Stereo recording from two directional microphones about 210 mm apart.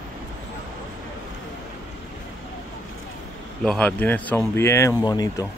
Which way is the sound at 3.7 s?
5° left (ahead or behind).